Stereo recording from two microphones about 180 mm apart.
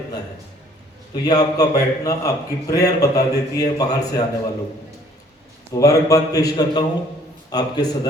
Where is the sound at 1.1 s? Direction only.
20° left (ahead or behind).